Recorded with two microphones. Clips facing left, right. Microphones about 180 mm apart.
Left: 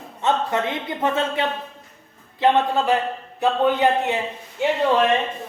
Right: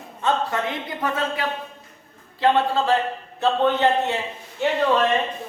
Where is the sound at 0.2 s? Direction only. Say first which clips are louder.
Left 1 dB; 20° left (ahead or behind).